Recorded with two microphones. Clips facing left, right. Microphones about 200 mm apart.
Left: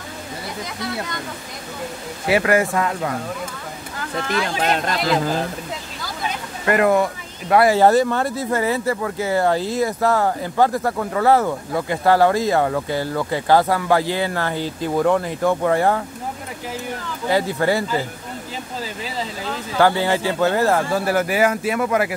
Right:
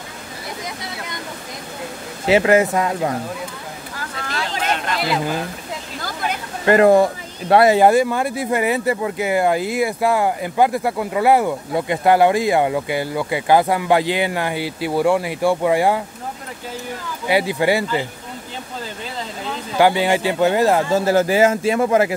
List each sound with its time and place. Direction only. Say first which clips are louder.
2.2 s speech: right 3 dB; 20° right (ahead or behind)
4.6 s speech: left 2 dB; 40° left (ahead or behind)
6.6 s speech: right 5 dB; 30° right (ahead or behind)
7.7 s speech: right 1 dB; 15° right (ahead or behind)
17.3 s speech: right 2 dB; 15° right (ahead or behind)
19.8 s speech: right 2 dB; 15° right (ahead or behind)